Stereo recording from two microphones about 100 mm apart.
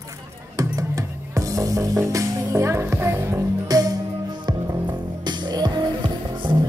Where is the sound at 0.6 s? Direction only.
35° right (ahead or behind).